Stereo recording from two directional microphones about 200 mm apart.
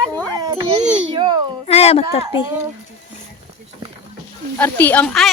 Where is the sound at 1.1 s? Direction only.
25° right (ahead or behind).